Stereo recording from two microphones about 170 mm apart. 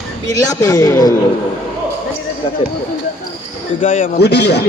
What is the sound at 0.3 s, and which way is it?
Speech, 20° left (ahead or behind).